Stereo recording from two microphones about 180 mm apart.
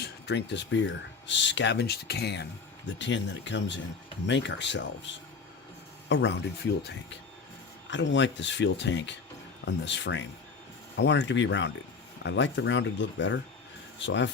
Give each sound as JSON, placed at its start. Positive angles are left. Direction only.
{"t": 0.0, "sound": "speech", "side_deg": 70}
{"t": 6.1, "sound": "speech", "side_deg": 80}
{"t": 7.9, "sound": "speech", "side_deg": 90}